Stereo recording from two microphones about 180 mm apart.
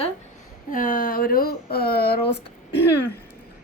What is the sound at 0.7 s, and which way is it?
Speech, 50° left (ahead or behind).